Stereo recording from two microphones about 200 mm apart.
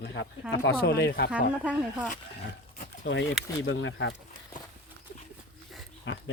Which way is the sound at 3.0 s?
65° left (ahead or behind).